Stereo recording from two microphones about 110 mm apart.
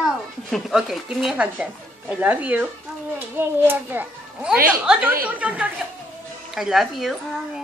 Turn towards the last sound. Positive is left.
turn(degrees=0)  # may be behind; listen again after turning